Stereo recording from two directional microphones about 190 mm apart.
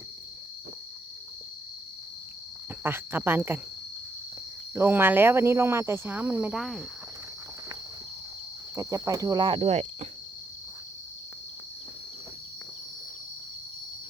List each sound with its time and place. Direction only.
2.8 s speech: 10° right (ahead or behind)
4.7 s speech: 10° right (ahead or behind)
8.7 s speech: 15° right (ahead or behind); by 10.1 s 35° right (ahead or behind)